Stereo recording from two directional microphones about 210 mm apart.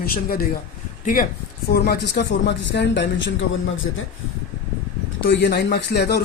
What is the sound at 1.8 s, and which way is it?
A man's voice, 50° left (ahead or behind).